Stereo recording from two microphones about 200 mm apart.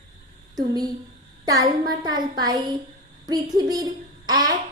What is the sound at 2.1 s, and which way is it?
A child's voice, 20° right (ahead or behind).